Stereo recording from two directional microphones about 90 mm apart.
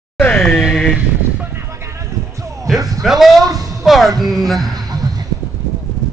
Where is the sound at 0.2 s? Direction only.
15° left (ahead or behind).